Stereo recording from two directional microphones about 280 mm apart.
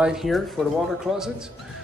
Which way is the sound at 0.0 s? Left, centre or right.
Centre.